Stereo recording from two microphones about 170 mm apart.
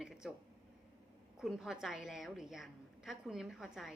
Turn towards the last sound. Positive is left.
turn(degrees=0)  # may be behind; listen again after turning